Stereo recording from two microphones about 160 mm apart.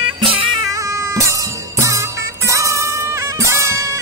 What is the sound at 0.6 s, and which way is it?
Music, 20° right (ahead or behind).